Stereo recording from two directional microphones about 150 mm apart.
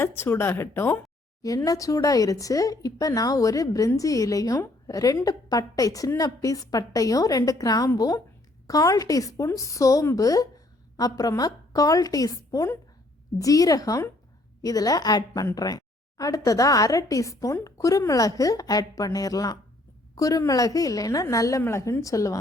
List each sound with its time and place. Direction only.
0.0 s speech: 15° left (ahead or behind)